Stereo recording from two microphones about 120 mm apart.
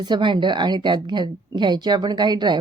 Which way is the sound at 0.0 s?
40° right (ahead or behind).